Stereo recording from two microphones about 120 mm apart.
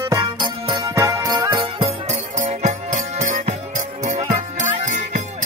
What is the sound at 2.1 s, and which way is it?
Music, 80° right.